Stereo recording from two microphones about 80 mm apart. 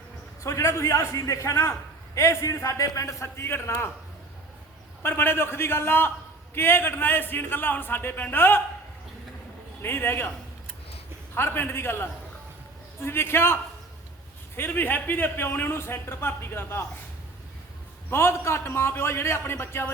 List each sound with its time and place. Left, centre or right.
0.4 s a man's voice: left
5.0 s a man's voice: left
9.8 s a man's voice: left
11.3 s a man's voice: left
18.1 s a man's voice: left